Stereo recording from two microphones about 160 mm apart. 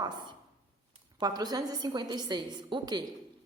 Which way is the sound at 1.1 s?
25° right (ahead or behind).